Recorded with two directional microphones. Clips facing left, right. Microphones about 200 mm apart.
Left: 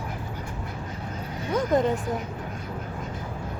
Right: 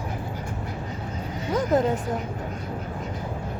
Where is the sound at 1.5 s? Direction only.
Centre (ahead or behind).